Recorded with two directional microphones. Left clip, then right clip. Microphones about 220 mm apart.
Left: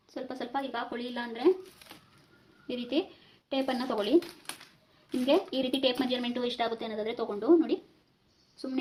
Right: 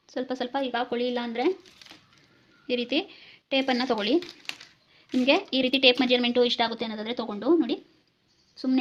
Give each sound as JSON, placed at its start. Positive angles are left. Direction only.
{"t": 0.1, "sound": "speech", "side_deg": -50}
{"t": 2.6, "sound": "speech", "side_deg": -50}